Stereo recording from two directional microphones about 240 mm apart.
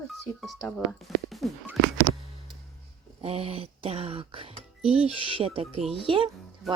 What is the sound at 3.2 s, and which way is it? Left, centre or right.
Speech, right.